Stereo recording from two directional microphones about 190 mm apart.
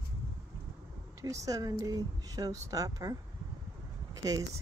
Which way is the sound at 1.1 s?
15° right (ahead or behind).